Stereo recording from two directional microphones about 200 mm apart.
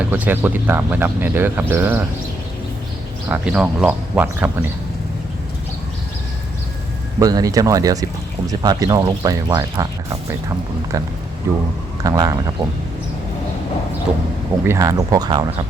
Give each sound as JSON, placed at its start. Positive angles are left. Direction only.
{"t": 0.0, "sound": "speech", "side_deg": -10}
{"t": 3.2, "sound": "speech", "side_deg": -10}
{"t": 7.2, "sound": "speech", "side_deg": -20}
{"t": 11.5, "sound": "speech", "side_deg": -15}
{"t": 14.7, "sound": "speech", "side_deg": -15}